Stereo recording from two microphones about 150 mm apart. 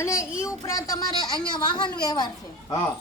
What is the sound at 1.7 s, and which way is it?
Speech, 30° left (ahead or behind).